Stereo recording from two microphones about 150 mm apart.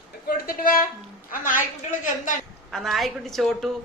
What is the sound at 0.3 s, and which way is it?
A woman's voice, 75° left (ahead or behind).